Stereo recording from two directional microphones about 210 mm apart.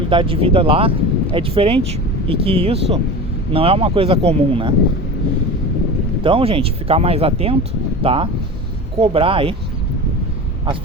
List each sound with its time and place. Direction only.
0.1 s speech: 25° right (ahead or behind)
6.2 s speech: 25° right (ahead or behind)